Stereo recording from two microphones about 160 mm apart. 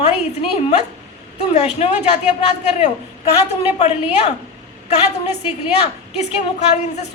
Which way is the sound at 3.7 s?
45° left (ahead or behind).